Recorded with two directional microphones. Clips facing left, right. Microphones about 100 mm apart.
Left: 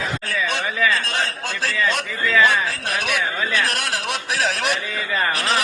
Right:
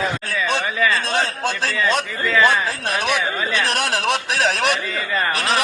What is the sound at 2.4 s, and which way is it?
A man's voice, 20° right (ahead or behind).